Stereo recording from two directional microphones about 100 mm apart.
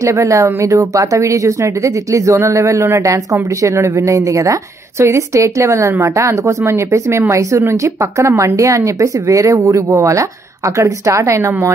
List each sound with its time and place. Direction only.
0.0 s speech: 30° right (ahead or behind)